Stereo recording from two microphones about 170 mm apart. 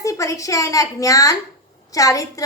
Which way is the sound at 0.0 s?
20° left (ahead or behind).